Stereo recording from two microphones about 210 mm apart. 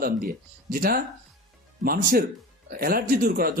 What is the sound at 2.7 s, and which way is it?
Speech, 45° right (ahead or behind).